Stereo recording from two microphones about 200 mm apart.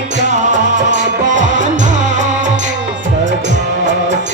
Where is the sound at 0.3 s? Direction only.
35° right (ahead or behind).